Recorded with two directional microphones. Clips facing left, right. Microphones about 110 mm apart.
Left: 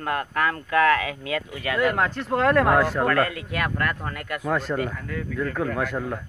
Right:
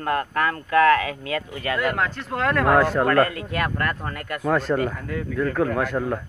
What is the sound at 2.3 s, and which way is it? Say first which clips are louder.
Speech: left 4 dB; 30° left (ahead or behind).